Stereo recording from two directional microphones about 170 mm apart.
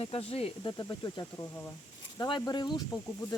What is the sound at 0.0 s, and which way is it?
Speech, 35° left (ahead or behind).